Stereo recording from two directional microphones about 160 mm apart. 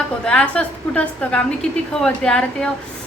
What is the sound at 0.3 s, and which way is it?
A woman's voice, 5° left (ahead or behind).